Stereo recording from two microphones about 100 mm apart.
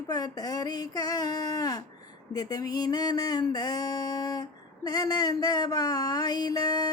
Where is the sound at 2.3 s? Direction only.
40° left (ahead or behind).